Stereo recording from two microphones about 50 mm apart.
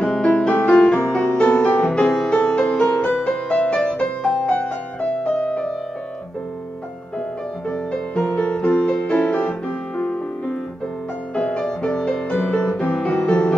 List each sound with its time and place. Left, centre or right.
0.0 s music: centre
7.7 s music: centre
11.3 s music: left